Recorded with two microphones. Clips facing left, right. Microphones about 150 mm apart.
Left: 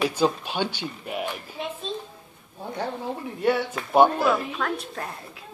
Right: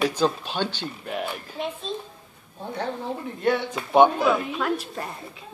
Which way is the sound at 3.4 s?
10° left (ahead or behind).